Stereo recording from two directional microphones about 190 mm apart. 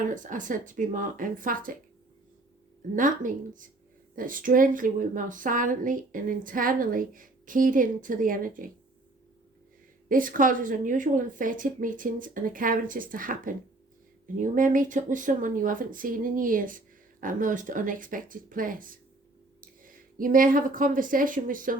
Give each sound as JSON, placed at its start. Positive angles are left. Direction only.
{"t": 0.1, "sound": "a woman's voice", "side_deg": -40}
{"t": 2.9, "sound": "a woman's voice", "side_deg": -45}
{"t": 10.1, "sound": "a woman's voice", "side_deg": -45}